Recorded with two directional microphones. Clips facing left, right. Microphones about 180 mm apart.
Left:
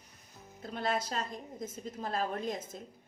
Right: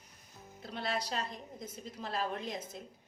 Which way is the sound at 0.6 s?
45° left (ahead or behind).